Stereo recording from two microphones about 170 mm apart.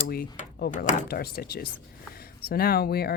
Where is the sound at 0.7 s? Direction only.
50° left (ahead or behind).